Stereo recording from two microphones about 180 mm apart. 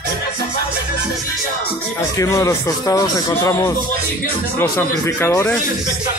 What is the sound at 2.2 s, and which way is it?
Speech, 20° left (ahead or behind).